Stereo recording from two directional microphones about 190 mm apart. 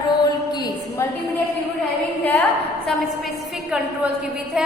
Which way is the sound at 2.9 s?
Centre (ahead or behind).